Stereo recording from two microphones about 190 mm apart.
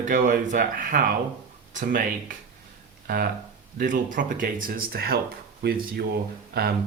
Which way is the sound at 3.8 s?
45° right (ahead or behind).